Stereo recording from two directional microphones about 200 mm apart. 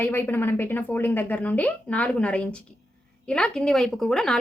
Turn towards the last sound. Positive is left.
turn(degrees=5)  # may be behind; listen again after turning